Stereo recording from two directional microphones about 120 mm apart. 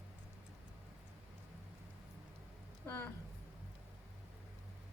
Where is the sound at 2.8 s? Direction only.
20° left (ahead or behind).